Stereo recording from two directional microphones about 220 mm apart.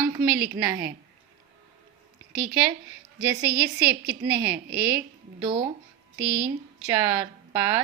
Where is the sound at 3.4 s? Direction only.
5° right (ahead or behind).